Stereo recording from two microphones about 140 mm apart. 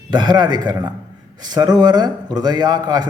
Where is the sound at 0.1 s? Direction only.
30° right (ahead or behind).